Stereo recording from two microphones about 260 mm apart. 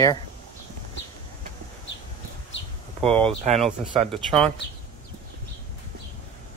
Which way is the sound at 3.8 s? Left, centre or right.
Centre.